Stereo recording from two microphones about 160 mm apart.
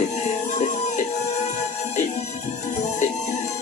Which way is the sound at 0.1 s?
45° left (ahead or behind).